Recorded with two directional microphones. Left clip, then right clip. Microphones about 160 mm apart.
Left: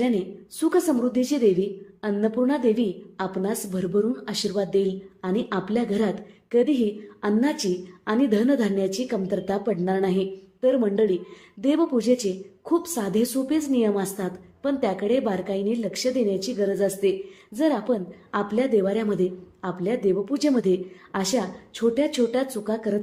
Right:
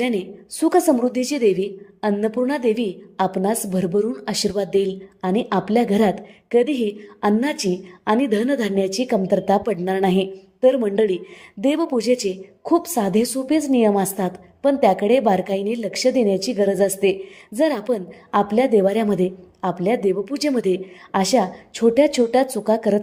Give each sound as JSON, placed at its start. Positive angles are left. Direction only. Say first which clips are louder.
{"t": 0.0, "sound": "a woman's voice", "louder": "right 2 dB", "side_deg": -35}